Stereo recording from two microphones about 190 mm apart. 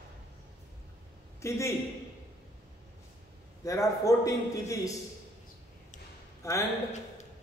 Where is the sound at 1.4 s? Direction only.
15° left (ahead or behind).